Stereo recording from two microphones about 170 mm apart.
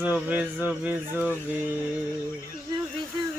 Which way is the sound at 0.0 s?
10° right (ahead or behind).